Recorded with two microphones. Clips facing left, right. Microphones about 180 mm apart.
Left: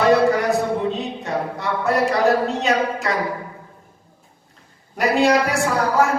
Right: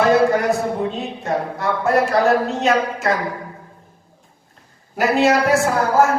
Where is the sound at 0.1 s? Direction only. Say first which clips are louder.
Right 1 dB; centre (ahead or behind).